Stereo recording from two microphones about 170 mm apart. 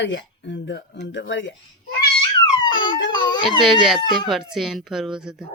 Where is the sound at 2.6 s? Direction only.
30° left (ahead or behind).